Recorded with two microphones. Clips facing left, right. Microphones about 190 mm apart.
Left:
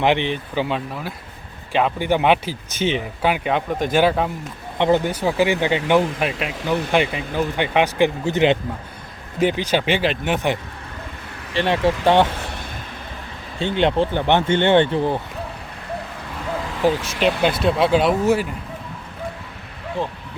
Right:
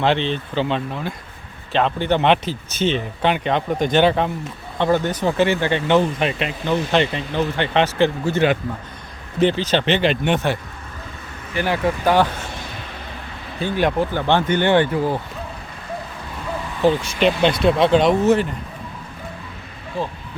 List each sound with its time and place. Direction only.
0.0 s speech: 15° left (ahead or behind)
4.8 s speech: 15° left (ahead or behind)
11.5 s speech: 25° left (ahead or behind)
13.6 s speech: 25° left (ahead or behind)
16.8 s speech: 5° left (ahead or behind)